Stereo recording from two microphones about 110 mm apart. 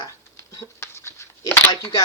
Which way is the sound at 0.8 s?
20° left (ahead or behind).